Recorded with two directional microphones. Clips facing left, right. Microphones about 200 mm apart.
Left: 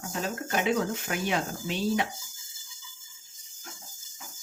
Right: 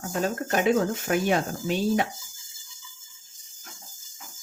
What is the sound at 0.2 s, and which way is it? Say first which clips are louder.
Speech: right 5 dB; 45° right (ahead or behind).